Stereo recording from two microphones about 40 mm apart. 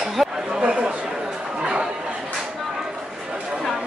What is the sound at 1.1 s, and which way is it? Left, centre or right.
Chatter, centre.